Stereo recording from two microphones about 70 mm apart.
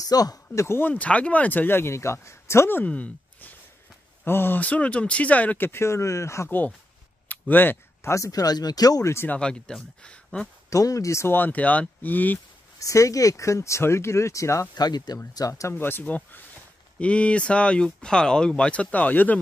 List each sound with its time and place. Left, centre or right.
0.0 s speech: left
0.7 s speech: left
0.9 s speech: centre; by 2.8 s left
2.8 s speech: left
7.2 s a sound: left
8.0 s speech: left
9.0 s speech: left
9.4 s speech: centre
10.7 s speech: left
11.3 s speech: left
12.7 s speech: left
14.8 s speech: left
15.3 s speech: left
15.7 s speech: left